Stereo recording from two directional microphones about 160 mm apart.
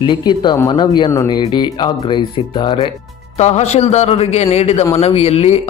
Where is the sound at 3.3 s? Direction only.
45° left (ahead or behind).